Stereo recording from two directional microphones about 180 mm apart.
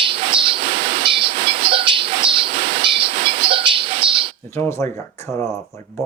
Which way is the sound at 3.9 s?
30° right (ahead or behind).